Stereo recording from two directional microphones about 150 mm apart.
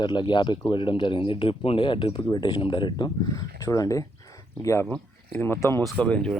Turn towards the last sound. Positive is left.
turn(degrees=10)  # may be behind; listen again after turning